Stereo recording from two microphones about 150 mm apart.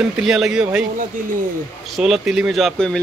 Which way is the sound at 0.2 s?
Centre (ahead or behind).